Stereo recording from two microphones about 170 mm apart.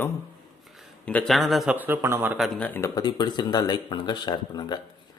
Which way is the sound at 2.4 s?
5° left (ahead or behind).